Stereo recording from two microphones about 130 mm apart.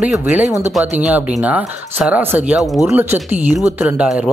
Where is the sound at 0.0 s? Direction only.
10° right (ahead or behind).